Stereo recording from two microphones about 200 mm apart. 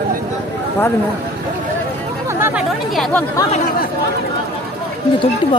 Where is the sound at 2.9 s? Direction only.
Centre (ahead or behind).